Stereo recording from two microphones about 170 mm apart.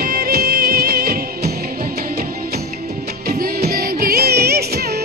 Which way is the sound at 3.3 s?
70° right (ahead or behind).